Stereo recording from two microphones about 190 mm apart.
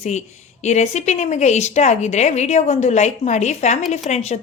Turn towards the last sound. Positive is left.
turn(degrees=35)  # may be behind; listen again after turning